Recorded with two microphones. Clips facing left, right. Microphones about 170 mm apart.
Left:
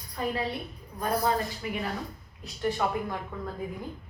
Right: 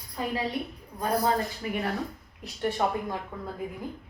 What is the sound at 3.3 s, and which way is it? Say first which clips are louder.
Speech: left 1 dB; 15° right (ahead or behind).